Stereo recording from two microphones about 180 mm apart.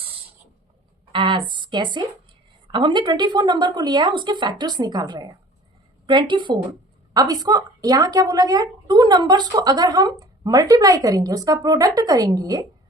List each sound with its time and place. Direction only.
1.1 s a woman's voice: 25° right (ahead or behind)